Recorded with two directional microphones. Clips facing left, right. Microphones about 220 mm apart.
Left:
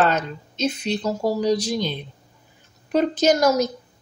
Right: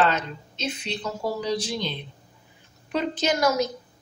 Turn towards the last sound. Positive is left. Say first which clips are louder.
# left 5 dB
turn(degrees=40)  # may be behind; listen again after turning